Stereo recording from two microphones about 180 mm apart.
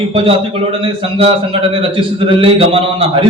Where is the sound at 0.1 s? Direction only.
30° right (ahead or behind).